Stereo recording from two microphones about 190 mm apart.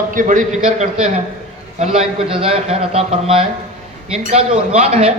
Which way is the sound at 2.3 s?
30° right (ahead or behind).